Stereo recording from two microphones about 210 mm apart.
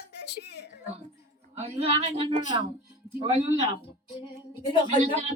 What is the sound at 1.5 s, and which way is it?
Speech, 30° right (ahead or behind).